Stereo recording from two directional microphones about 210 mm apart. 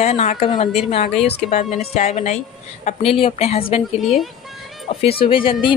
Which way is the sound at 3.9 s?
Centre (ahead or behind).